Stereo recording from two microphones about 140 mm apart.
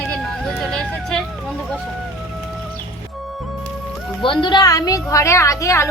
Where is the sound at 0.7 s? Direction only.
5° left (ahead or behind).